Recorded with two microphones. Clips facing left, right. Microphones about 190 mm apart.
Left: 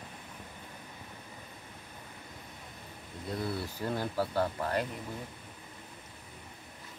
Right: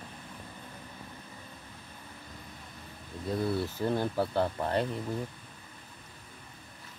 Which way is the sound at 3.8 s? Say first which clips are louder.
Right 2 dB; 20° right (ahead or behind).